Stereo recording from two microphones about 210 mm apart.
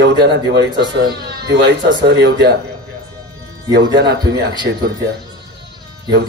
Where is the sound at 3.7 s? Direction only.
50° right (ahead or behind).